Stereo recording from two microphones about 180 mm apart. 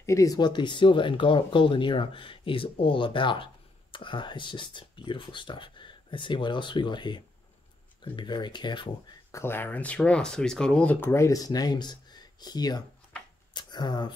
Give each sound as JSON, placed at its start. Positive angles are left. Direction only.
{"t": 0.0, "sound": "speech", "side_deg": 15}
{"t": 9.4, "sound": "speech", "side_deg": 10}
{"t": 13.5, "sound": "shuffling cards", "side_deg": 25}